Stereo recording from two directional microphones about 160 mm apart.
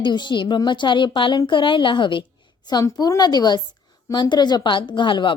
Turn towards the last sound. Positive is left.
turn(degrees=30)  # may be behind; listen again after turning